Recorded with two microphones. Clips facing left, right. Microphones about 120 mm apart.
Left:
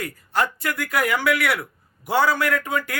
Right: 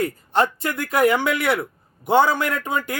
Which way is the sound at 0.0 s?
25° right (ahead or behind).